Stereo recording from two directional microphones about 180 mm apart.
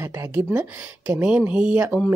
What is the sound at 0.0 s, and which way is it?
Speech, 15° right (ahead or behind).